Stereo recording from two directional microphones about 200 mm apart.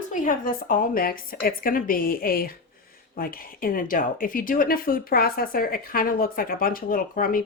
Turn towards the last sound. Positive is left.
turn(degrees=45)  # may be behind; listen again after turning